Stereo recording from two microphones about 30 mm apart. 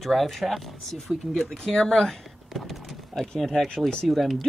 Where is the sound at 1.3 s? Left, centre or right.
Centre.